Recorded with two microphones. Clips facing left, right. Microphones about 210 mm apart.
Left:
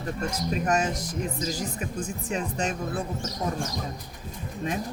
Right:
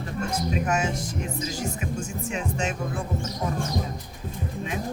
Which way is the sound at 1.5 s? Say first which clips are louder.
Right 1 dB; 35° left (ahead or behind).